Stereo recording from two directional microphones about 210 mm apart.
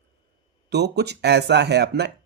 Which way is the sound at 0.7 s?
50° right (ahead or behind).